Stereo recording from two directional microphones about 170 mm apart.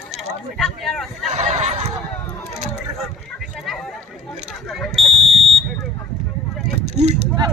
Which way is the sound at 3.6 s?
Centre (ahead or behind).